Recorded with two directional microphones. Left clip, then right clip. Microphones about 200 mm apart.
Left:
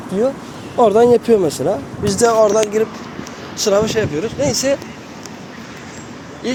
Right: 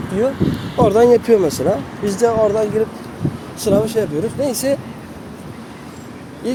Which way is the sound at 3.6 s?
10° right (ahead or behind).